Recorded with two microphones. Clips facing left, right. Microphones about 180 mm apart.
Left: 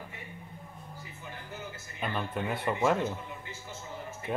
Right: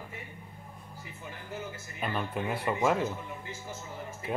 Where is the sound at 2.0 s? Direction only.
5° right (ahead or behind).